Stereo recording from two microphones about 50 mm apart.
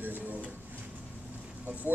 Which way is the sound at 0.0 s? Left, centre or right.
Right.